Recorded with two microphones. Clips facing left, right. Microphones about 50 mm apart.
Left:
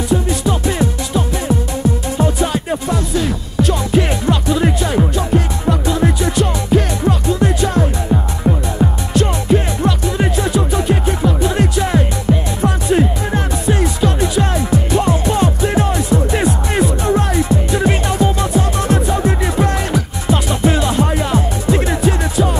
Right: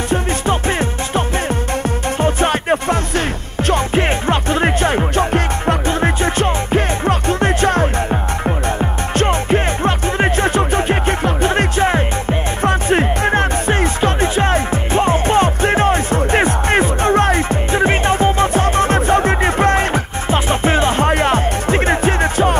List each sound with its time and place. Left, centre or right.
0.1 s music: right
8.1 s music: right
9.1 s music: right